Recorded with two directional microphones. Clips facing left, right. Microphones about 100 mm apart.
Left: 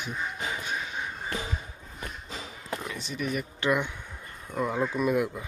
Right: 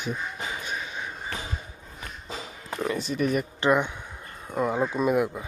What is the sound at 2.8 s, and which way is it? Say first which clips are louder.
Speech: right 12 dB; 55° right (ahead or behind).